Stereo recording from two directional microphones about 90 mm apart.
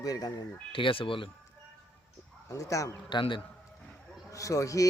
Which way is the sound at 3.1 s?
60° left (ahead or behind).